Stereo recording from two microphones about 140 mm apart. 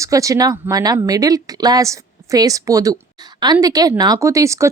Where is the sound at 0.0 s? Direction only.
25° right (ahead or behind).